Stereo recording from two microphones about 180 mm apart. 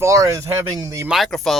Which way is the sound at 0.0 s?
15° right (ahead or behind).